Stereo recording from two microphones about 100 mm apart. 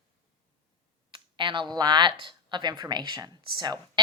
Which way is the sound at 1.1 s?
50° right (ahead or behind).